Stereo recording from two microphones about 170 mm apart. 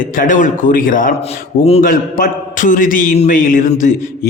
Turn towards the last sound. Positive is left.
turn(degrees=50)  # may be behind; listen again after turning